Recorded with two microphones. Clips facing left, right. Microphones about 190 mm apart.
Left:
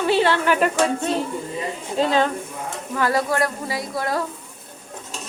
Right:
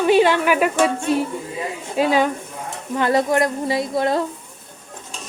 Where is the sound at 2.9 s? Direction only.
20° right (ahead or behind).